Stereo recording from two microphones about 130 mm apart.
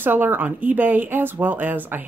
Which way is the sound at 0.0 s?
15° right (ahead or behind).